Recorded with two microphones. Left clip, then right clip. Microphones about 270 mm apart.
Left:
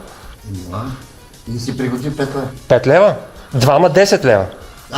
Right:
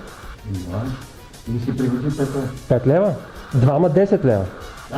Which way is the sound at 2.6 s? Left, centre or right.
Left.